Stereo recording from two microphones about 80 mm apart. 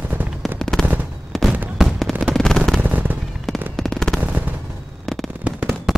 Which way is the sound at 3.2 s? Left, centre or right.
Centre.